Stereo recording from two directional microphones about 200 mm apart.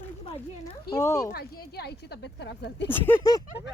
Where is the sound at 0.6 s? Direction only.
15° left (ahead or behind).